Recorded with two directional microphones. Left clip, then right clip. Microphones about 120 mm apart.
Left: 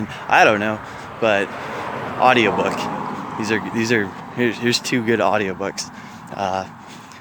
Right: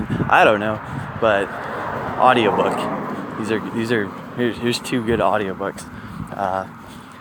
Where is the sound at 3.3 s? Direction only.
30° left (ahead or behind).